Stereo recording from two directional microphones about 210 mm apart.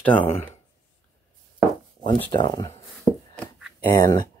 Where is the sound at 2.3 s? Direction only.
20° left (ahead or behind).